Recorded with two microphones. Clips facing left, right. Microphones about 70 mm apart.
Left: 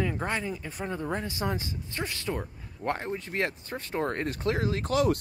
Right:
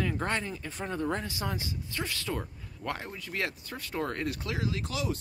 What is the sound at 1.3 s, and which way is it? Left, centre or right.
Speech, left.